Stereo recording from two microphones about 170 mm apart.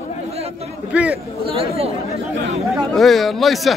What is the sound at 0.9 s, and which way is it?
Speech, 5° right (ahead or behind).